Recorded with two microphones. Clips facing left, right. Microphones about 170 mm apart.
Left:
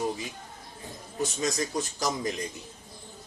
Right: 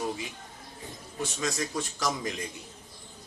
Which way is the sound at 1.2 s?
35° left (ahead or behind).